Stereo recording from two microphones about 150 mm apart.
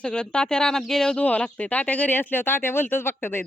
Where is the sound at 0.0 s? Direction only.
5° left (ahead or behind).